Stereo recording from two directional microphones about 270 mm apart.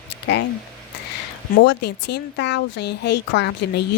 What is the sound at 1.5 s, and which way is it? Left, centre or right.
Speech, left.